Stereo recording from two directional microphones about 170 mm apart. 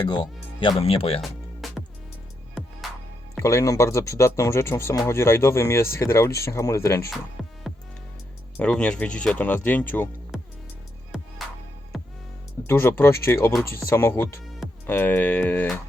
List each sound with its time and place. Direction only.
0.0 s speech: 25° left (ahead or behind)
1.2 s music: centre (ahead or behind)
3.3 s speech: 15° left (ahead or behind)
7.4 s music: centre (ahead or behind)
8.5 s speech: 5° left (ahead or behind)
11.9 s music: centre (ahead or behind)
12.6 s speech: 15° left (ahead or behind)